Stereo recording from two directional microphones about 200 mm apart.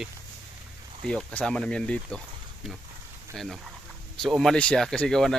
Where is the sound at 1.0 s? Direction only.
5° left (ahead or behind).